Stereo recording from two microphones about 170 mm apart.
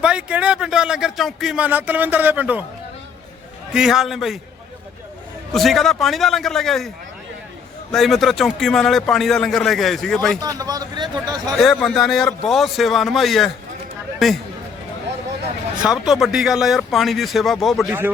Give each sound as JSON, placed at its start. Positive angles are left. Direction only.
{"t": 0.0, "sound": "speech", "side_deg": -5}
{"t": 3.7, "sound": "a man's voice", "side_deg": -5}
{"t": 5.5, "sound": "a man's voice", "side_deg": 0}
{"t": 7.9, "sound": "a man's voice", "side_deg": 0}
{"t": 10.4, "sound": "speech", "side_deg": -20}
{"t": 11.5, "sound": "a man's voice", "side_deg": 0}
{"t": 15.8, "sound": "a man's voice", "side_deg": -5}